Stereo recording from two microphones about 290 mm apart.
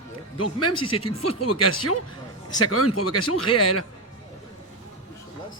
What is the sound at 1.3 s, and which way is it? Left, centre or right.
Speech, left.